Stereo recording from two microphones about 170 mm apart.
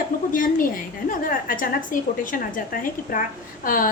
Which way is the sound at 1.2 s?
55° left (ahead or behind).